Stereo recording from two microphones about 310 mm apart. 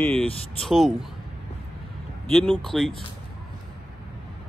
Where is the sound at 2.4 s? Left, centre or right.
Centre.